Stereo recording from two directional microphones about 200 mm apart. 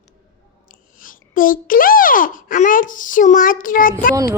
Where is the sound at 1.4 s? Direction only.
45° left (ahead or behind).